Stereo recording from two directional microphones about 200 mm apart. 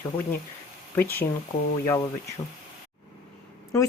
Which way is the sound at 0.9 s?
10° left (ahead or behind).